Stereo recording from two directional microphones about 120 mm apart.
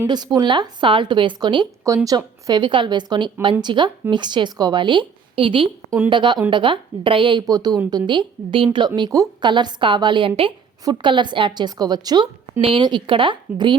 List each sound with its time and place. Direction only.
0.1 s a woman's voice: 35° right (ahead or behind)
7.4 s a woman's voice: 35° right (ahead or behind)